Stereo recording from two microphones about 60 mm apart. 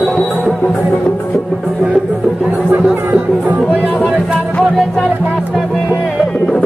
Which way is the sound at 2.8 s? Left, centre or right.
Centre.